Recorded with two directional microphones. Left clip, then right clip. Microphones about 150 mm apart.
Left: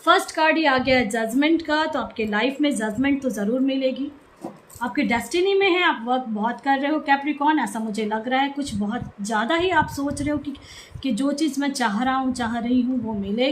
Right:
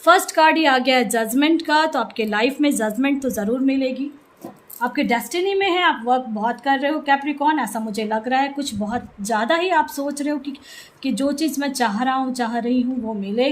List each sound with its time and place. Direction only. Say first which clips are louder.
0.0 s a woman's voice: right 4 dB; 60° right (ahead or behind)
4.8 s speech: right 3 dB; 40° right (ahead or behind)